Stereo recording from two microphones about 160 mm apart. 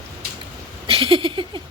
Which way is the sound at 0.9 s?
35° right (ahead or behind).